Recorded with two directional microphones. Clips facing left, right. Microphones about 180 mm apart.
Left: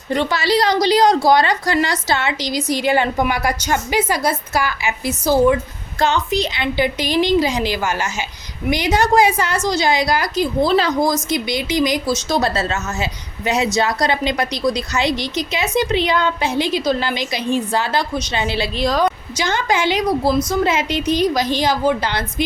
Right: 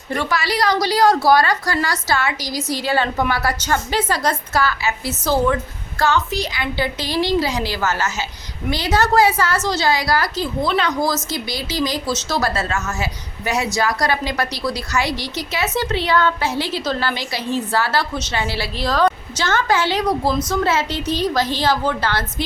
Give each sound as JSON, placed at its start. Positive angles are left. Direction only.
{"t": 0.1, "sound": "a woman's voice", "side_deg": 25}
{"t": 10.6, "sound": "speech", "side_deg": 30}
{"t": 11.0, "sound": "a woman's voice", "side_deg": 20}
{"t": 12.4, "sound": "a woman's voice", "side_deg": 25}